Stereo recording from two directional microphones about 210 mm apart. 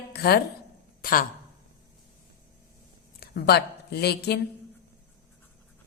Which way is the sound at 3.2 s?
50° left (ahead or behind).